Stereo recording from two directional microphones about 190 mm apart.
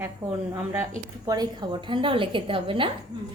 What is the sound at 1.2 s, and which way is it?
A woman's voice, 20° right (ahead or behind).